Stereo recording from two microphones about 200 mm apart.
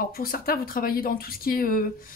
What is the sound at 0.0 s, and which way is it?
A woman's voice, 50° left (ahead or behind).